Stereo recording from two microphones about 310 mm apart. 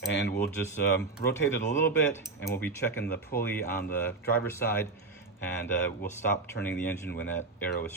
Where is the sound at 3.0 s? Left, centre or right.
Left.